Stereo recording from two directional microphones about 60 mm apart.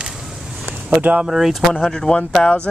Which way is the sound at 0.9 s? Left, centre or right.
Centre.